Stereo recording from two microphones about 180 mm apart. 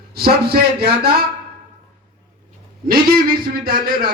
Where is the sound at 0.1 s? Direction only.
60° right (ahead or behind).